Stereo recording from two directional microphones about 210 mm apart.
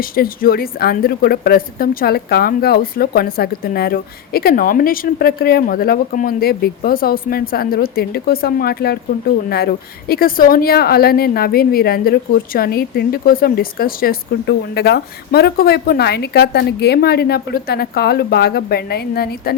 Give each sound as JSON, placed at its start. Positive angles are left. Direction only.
{"t": 0.0, "sound": "a woman's voice", "side_deg": 45}